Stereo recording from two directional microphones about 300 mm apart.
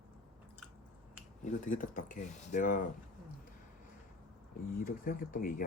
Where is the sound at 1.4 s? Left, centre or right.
Left.